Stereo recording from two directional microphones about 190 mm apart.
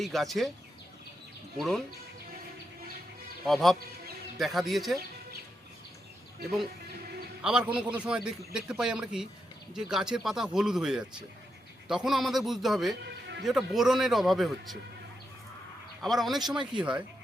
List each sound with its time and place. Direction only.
0.0 s a man's voice: centre (ahead or behind)
1.5 s a man's voice: centre (ahead or behind)
3.4 s a man's voice: centre (ahead or behind)
7.4 s a man's voice: 5° right (ahead or behind)
13.1 s a sound: 65° right (ahead or behind)
13.4 s a man's voice: centre (ahead or behind)
16.0 s a man's voice: centre (ahead or behind)